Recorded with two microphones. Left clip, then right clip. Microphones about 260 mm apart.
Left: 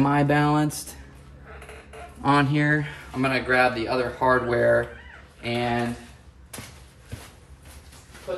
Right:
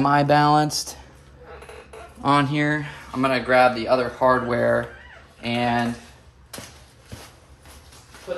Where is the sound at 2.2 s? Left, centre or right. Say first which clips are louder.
Right 1 dB; centre; by 5.8 s right.